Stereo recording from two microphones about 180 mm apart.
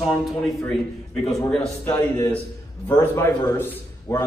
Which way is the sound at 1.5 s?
5° left (ahead or behind).